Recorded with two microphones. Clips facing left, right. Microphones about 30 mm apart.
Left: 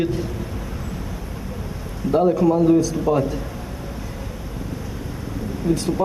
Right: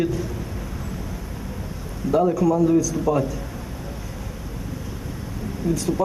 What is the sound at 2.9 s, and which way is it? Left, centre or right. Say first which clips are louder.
Speech: left 2 dB; left.